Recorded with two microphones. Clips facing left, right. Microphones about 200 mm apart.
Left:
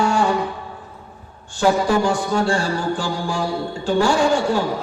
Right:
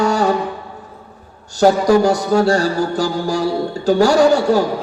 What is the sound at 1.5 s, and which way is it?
Music, 40° right (ahead or behind).